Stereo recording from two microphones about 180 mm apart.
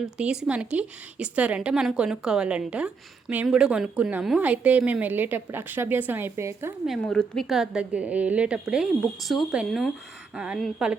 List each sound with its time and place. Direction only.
0.0 s a woman's voice: 5° right (ahead or behind)
6.8 s a woman's voice: centre (ahead or behind)